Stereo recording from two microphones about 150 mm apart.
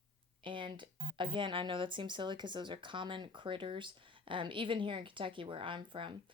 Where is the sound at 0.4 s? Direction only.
35° right (ahead or behind).